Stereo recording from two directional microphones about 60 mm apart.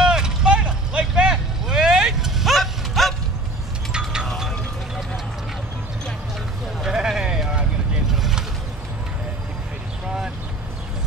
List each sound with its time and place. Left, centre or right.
0.0 s vehicle: centre
4.4 s a sound: centre
6.8 s vehicle: centre
10.0 s vehicle: centre